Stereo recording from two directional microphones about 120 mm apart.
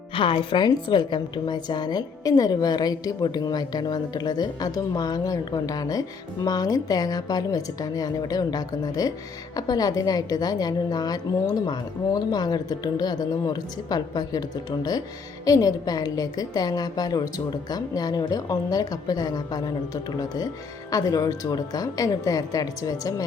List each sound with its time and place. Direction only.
0.1 s speech: 45° left (ahead or behind)
15.4 s a woman's voice: 30° left (ahead or behind)